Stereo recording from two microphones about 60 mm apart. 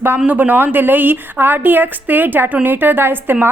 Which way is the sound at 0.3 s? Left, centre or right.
Right.